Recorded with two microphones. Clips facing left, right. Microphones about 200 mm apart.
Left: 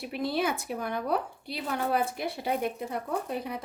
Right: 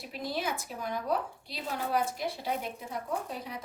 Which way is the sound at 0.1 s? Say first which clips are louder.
Left 5 dB; 60° left (ahead or behind).